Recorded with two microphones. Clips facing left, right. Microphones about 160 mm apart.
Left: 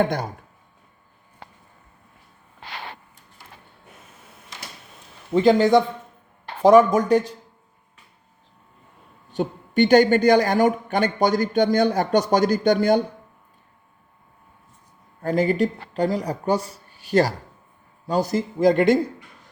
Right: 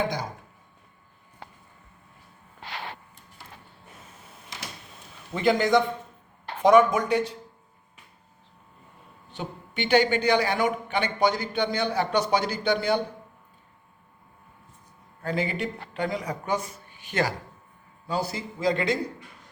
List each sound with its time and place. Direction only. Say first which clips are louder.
0.0 s speech: left 6 dB; 55° left (ahead or behind)
5.3 s speech: left 6 dB; 30° left (ahead or behind)
9.3 s a woman's voice: left 12 dB; 45° left (ahead or behind)
15.2 s a woman's voice: left 8 dB; 45° left (ahead or behind)